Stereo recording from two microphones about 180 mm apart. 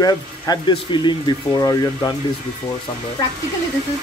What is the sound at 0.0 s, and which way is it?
Speech, 25° left (ahead or behind).